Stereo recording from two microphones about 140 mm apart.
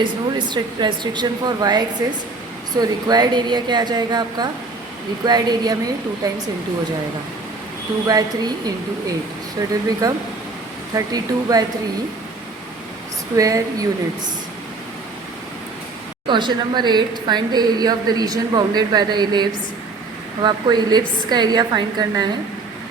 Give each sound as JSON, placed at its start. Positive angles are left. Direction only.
{"t": 0.0, "sound": "a woman's voice", "side_deg": -35}
{"t": 8.0, "sound": "speech", "side_deg": -30}
{"t": 13.3, "sound": "speech", "side_deg": -25}
{"t": 16.2, "sound": "a woman's voice", "side_deg": -35}